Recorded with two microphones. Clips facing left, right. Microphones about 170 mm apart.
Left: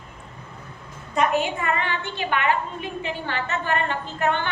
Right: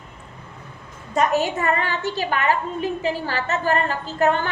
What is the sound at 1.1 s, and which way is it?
A woman's voice, 40° right (ahead or behind).